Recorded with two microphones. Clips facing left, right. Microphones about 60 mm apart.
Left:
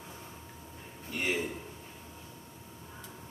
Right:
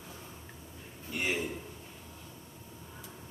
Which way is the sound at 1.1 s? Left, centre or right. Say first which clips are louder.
Left 1 dB; centre.